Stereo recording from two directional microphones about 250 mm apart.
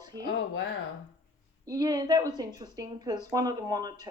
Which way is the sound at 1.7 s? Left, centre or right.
Centre.